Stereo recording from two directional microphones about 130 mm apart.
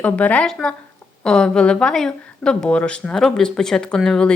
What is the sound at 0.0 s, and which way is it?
Speech, 10° left (ahead or behind).